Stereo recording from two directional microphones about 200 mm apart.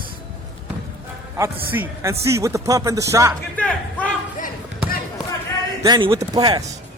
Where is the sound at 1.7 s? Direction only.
10° right (ahead or behind).